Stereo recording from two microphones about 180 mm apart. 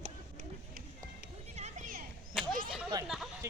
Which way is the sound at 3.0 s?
Centre (ahead or behind).